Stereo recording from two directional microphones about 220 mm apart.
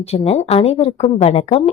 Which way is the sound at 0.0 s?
30° left (ahead or behind).